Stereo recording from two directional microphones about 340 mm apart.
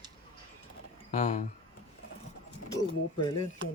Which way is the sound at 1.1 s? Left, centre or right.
Left.